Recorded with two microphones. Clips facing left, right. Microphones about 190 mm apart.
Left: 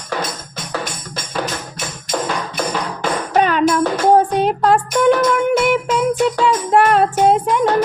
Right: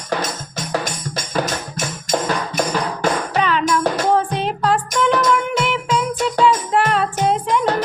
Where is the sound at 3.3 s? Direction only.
50° left (ahead or behind).